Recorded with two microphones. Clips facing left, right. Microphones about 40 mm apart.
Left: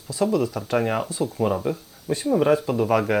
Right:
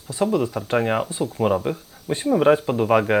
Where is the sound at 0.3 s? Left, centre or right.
Right.